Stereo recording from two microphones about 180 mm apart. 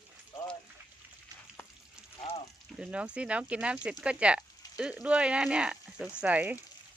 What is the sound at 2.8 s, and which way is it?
Speech, 5° right (ahead or behind).